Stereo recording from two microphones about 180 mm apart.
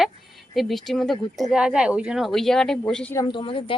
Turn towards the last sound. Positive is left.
turn(degrees=30)  # may be behind; listen again after turning